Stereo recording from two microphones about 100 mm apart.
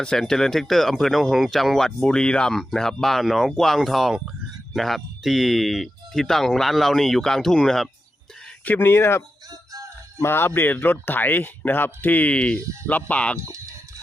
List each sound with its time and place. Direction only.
0.0 s speech: 5° left (ahead or behind)
8.6 s speech: 20° left (ahead or behind)
9.5 s music: 35° right (ahead or behind)
10.2 s speech: 25° left (ahead or behind)